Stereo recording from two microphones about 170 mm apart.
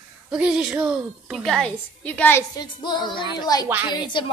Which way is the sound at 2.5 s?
25° left (ahead or behind).